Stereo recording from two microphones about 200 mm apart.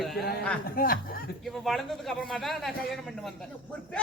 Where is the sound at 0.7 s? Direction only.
45° left (ahead or behind).